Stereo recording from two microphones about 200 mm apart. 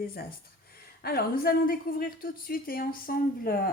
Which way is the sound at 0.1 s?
50° left (ahead or behind).